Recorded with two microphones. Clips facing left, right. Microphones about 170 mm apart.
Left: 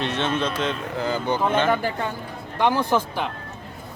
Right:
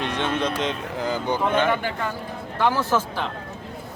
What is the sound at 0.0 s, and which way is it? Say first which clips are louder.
Speech: even; 15° right (ahead or behind).